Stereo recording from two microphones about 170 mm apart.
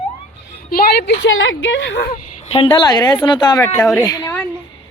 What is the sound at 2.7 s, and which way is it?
A woman's voice, 25° left (ahead or behind).